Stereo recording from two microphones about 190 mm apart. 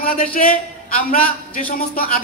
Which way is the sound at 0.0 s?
50° left (ahead or behind).